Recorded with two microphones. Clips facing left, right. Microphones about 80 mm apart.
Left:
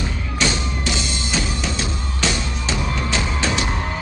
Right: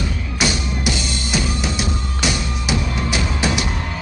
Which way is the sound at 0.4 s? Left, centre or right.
Centre.